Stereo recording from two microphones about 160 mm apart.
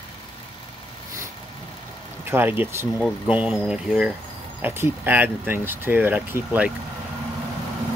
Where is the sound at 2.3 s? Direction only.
10° right (ahead or behind).